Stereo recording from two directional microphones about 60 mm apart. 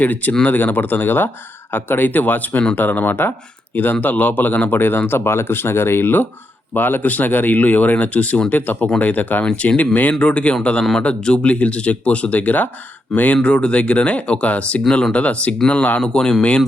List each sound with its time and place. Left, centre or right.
0.0 s speech: left; by 16.6 s centre